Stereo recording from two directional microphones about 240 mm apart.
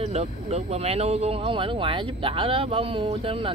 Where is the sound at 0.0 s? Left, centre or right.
Right.